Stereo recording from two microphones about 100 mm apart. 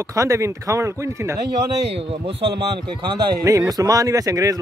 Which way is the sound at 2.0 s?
75° right (ahead or behind).